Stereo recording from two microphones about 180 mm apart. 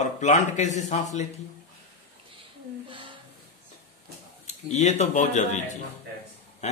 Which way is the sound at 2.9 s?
30° right (ahead or behind).